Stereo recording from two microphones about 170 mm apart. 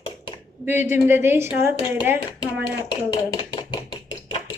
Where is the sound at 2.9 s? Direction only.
30° left (ahead or behind).